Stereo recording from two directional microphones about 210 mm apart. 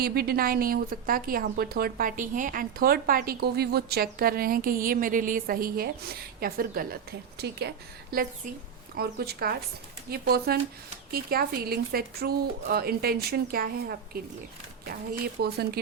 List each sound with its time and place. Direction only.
0.0 s a woman's voice: 50° right (ahead or behind)